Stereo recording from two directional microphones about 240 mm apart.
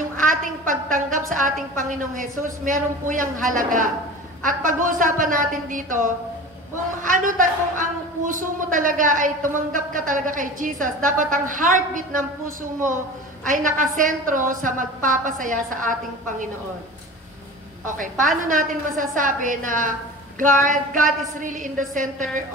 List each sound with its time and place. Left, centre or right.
0.2 s a woman's voice: right
13.5 s speech: right
17.8 s speech: right